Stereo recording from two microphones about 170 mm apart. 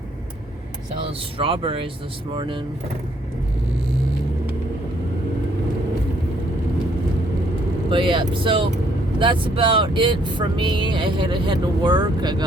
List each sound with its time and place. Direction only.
1.4 s speech: 30° right (ahead or behind)
7.9 s speech: 30° right (ahead or behind)